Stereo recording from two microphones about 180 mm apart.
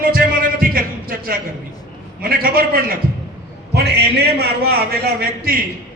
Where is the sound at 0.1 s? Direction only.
55° right (ahead or behind).